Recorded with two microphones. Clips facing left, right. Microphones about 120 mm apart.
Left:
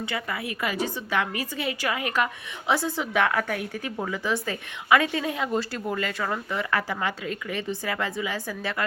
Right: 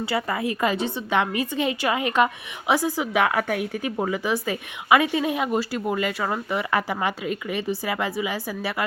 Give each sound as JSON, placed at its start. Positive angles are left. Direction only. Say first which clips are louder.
{"t": 0.0, "sound": "a woman's voice", "louder": "right 6 dB", "side_deg": -35}
{"t": 0.8, "sound": "a woman's voice", "louder": "right 3 dB", "side_deg": -20}